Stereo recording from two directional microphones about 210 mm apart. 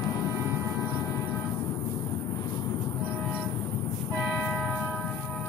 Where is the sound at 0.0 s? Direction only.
15° left (ahead or behind).